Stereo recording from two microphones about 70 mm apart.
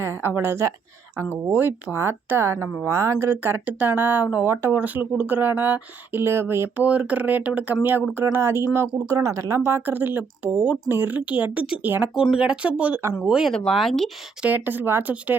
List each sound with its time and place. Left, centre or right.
0.0 s speech: right
3.2 s speech: right
4.4 s speech: right
6.7 s speech: centre
8.1 s speech: right
9.0 s speech: right
9.6 s speech: right
12.1 s speech: centre
13.7 s speech: centre
14.4 s speech: right